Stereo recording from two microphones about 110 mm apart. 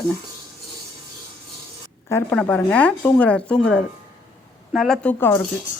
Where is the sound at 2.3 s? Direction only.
10° left (ahead or behind).